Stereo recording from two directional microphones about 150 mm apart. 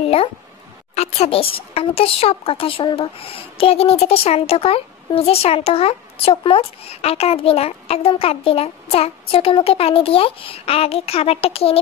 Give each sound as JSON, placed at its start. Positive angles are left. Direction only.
{"t": 0.9, "sound": "speech", "side_deg": 45}